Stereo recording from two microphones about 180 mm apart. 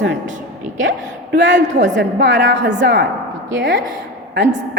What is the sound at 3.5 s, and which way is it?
Speech, 85° right.